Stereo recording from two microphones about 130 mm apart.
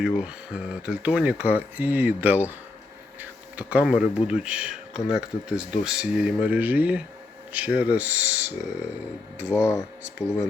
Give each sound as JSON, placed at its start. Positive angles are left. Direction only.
{"t": 0.0, "sound": "speech", "side_deg": -5}
{"t": 9.5, "sound": "speech", "side_deg": 20}